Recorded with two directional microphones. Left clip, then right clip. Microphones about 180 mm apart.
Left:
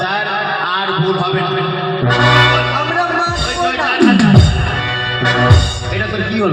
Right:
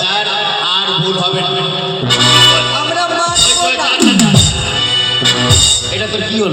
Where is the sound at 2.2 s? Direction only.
35° left (ahead or behind).